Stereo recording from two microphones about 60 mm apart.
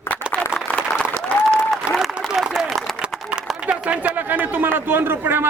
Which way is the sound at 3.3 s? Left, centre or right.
Centre.